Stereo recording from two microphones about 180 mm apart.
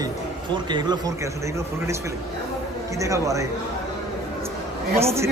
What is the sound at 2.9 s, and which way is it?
Speech, 15° right (ahead or behind).